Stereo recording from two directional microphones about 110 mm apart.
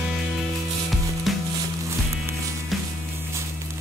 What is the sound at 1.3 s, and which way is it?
Music, centre (ahead or behind).